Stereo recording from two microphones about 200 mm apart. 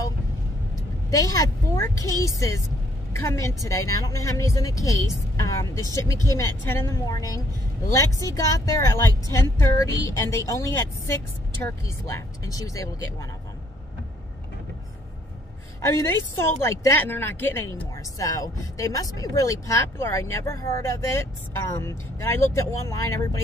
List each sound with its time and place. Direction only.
1.1 s a woman's voice: 15° left (ahead or behind)
15.8 s a woman's voice: 15° left (ahead or behind)